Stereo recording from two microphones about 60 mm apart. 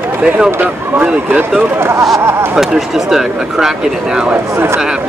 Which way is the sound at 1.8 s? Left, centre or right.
Right.